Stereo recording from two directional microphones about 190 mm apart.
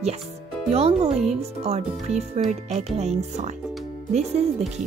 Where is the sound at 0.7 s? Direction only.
35° right (ahead or behind).